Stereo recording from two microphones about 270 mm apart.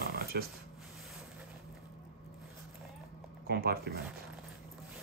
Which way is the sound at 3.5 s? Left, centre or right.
Right.